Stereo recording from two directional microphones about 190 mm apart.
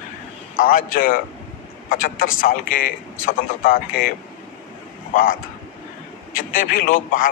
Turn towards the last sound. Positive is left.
turn(degrees=45)  # may be behind; listen again after turning